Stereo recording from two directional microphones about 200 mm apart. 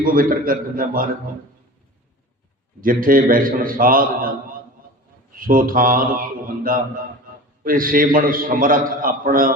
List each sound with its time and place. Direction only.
0.0 s a man's voice: 45° right (ahead or behind)
2.8 s a man's voice: 45° right (ahead or behind)
5.4 s a man's voice: 45° right (ahead or behind)